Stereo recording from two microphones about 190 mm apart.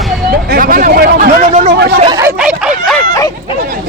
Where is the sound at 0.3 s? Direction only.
55° right (ahead or behind).